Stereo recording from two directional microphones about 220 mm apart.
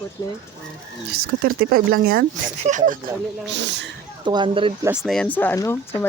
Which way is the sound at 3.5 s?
55° right (ahead or behind).